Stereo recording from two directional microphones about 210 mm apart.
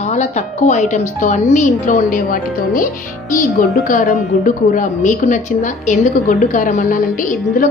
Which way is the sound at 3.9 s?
40° left (ahead or behind).